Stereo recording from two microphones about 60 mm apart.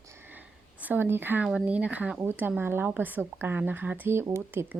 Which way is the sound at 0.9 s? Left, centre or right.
Right.